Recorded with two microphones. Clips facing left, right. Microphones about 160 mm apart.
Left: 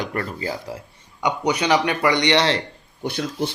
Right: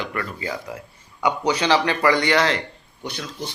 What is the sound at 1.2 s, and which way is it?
A man's voice, 15° left (ahead or behind).